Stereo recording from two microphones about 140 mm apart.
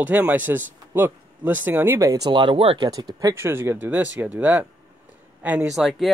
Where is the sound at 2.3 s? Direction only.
35° right (ahead or behind).